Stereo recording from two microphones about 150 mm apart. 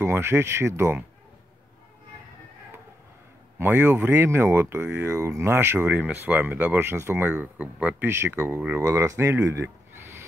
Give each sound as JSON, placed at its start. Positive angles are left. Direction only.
{"t": 0.0, "sound": "speech", "side_deg": -15}
{"t": 3.5, "sound": "speech", "side_deg": -15}